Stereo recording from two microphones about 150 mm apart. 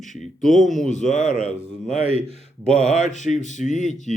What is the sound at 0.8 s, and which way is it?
Speech, 55° left (ahead or behind).